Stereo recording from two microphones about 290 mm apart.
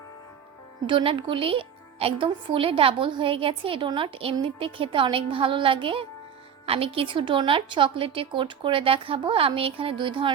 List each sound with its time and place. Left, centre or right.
0.9 s speech: centre